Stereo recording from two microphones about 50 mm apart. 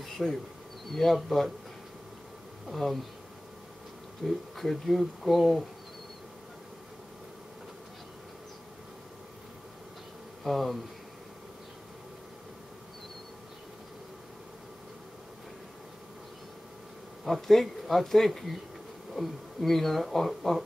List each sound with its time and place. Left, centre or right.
0.0 s insect: centre
0.9 s speech: centre
2.7 s speech: centre
4.2 s speech: centre
10.4 s speech: centre
17.2 s speech: centre